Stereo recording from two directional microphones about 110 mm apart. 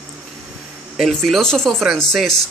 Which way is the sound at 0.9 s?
Centre (ahead or behind).